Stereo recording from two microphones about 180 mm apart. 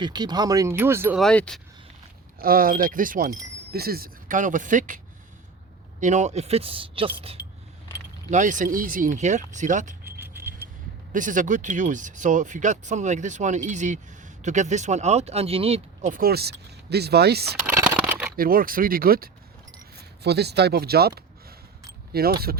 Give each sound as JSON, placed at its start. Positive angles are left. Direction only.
{"t": 0.0, "sound": "speech", "side_deg": -25}
{"t": 1.2, "sound": "speech", "side_deg": 5}
{"t": 2.4, "sound": "speech", "side_deg": -55}
{"t": 6.0, "sound": "speech", "side_deg": -40}
{"t": 8.3, "sound": "speech", "side_deg": -45}
{"t": 10.2, "sound": "a sound", "side_deg": -10}
{"t": 11.1, "sound": "speech", "side_deg": -45}
{"t": 17.7, "sound": "a sound", "side_deg": -10}
{"t": 18.3, "sound": "speech", "side_deg": -55}
{"t": 20.2, "sound": "speech", "side_deg": -65}
{"t": 22.1, "sound": "speech", "side_deg": -60}